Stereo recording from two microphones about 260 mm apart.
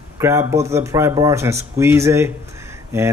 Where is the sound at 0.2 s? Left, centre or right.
Centre.